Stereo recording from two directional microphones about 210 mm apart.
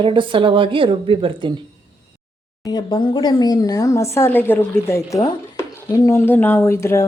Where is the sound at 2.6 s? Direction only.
20° left (ahead or behind).